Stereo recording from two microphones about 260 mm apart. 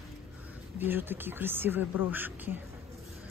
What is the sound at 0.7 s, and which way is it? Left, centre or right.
Speech, centre.